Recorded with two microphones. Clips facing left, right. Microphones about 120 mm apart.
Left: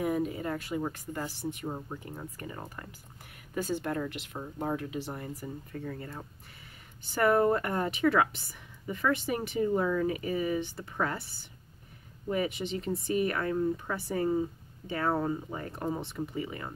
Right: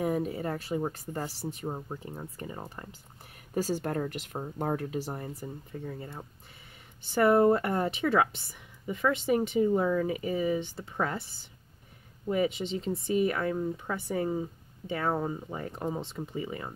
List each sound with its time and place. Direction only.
0.0 s speech: 35° right (ahead or behind)
3.5 s speech: 40° right (ahead or behind); by 16.7 s 25° right (ahead or behind)